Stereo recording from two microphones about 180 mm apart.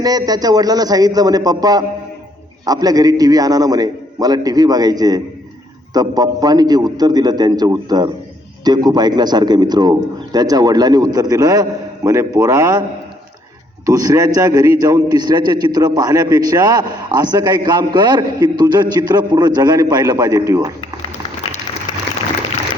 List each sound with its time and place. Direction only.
0.0 s a man's voice: 20° right (ahead or behind)
13.8 s a man's voice: 20° right (ahead or behind)